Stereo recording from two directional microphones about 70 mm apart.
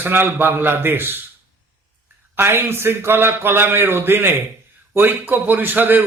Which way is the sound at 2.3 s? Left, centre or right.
Right.